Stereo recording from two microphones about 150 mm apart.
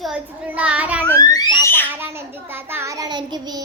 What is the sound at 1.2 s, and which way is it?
Speech, 25° left (ahead or behind).